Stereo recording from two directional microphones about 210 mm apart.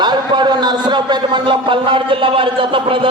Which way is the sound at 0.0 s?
20° right (ahead or behind).